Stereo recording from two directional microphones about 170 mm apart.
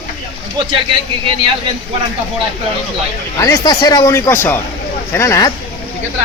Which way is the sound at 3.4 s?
20° left (ahead or behind).